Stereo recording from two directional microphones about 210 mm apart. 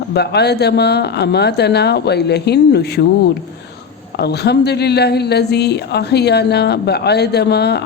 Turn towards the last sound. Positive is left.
turn(degrees=50)  # may be behind; listen again after turning